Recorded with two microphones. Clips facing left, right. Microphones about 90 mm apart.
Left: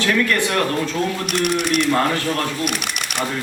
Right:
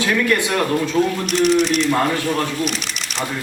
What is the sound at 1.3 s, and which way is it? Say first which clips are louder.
Speech: right 4 dB; 55° left (ahead or behind).